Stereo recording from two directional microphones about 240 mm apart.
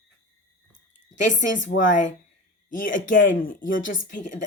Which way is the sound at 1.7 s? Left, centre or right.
Left.